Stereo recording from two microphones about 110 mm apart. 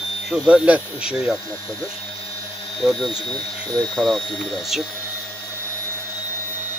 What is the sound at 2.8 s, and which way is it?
Speech, centre (ahead or behind).